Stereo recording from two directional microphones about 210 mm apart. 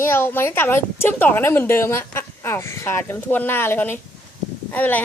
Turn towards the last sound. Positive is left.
turn(degrees=10)  # may be behind; listen again after turning